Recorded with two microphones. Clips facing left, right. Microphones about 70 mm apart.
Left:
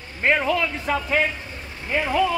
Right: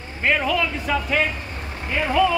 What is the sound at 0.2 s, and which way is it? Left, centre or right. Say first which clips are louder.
Speech: left 1 dB; left.